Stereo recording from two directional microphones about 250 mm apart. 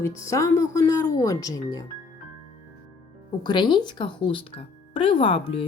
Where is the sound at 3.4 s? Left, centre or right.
Centre.